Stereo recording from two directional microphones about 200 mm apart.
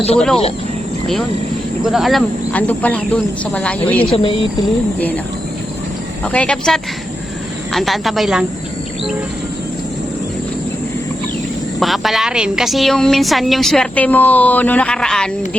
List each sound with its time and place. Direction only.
1.8 s speech: centre (ahead or behind)
4.0 s speech: 25° left (ahead or behind)
4.9 s speech: 10° left (ahead or behind)
6.2 s a woman's voice: 5° left (ahead or behind)
11.8 s a woman's voice: centre (ahead or behind)